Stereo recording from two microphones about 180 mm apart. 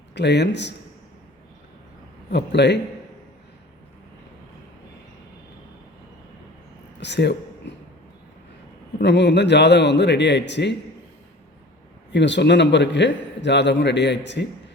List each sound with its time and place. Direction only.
0.1 s a man's voice: 70° left (ahead or behind)
2.3 s a man's voice: 70° left (ahead or behind)
7.0 s a man's voice: 70° left (ahead or behind)
7.6 s a sound: 75° left (ahead or behind)
9.0 s a man's voice: 75° left (ahead or behind)
12.1 s a man's voice: 75° left (ahead or behind)